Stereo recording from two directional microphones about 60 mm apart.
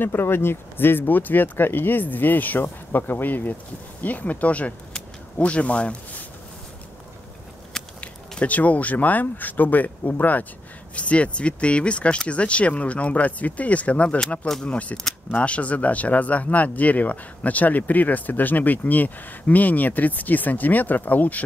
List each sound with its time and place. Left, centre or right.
0.0 s speech: left
8.0 s speech: left